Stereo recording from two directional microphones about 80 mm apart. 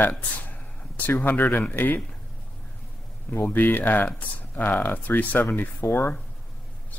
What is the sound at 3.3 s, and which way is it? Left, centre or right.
Speech, left.